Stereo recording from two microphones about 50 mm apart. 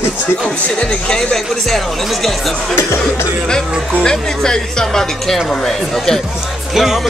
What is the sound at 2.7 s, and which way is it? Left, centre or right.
Speech, left.